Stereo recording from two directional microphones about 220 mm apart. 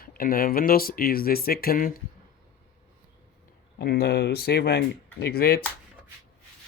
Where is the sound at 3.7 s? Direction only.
45° left (ahead or behind).